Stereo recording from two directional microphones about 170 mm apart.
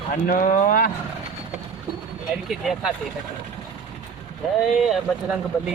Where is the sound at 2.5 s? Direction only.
Centre (ahead or behind).